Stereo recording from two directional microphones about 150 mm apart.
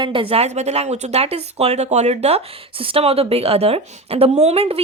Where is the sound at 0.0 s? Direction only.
35° right (ahead or behind).